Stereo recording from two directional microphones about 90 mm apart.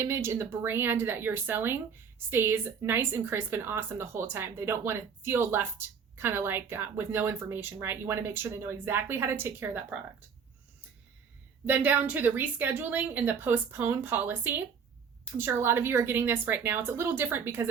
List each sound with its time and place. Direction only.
0.0 s speech: 30° right (ahead or behind)
11.6 s speech: 20° right (ahead or behind)